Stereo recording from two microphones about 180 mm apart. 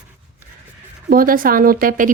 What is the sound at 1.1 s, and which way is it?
Speech, 50° right (ahead or behind).